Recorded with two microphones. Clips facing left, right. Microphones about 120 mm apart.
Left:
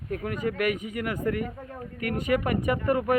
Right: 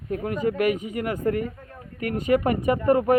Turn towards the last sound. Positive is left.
turn(degrees=-30)  # may be behind; listen again after turning